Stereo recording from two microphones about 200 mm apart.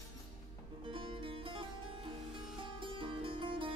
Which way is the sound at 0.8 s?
25° right (ahead or behind).